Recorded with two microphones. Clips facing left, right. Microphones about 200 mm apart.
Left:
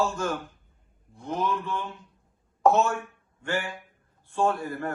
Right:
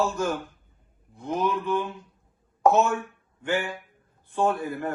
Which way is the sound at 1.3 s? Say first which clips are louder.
Right 2 dB; centre (ahead or behind).